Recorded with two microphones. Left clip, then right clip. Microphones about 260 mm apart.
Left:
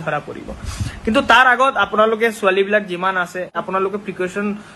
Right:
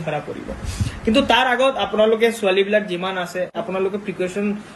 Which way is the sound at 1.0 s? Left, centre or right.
Centre.